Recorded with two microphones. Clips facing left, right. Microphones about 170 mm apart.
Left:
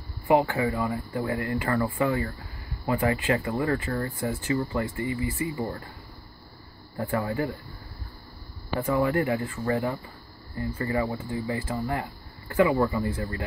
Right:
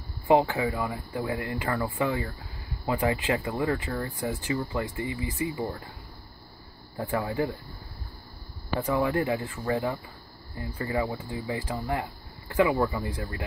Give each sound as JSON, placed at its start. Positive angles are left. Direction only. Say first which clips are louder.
{"t": 0.3, "sound": "speech", "louder": "even", "side_deg": -20}
{"t": 7.0, "sound": "speech", "louder": "left 1 dB", "side_deg": -15}
{"t": 8.8, "sound": "speech", "louder": "left 2 dB", "side_deg": -15}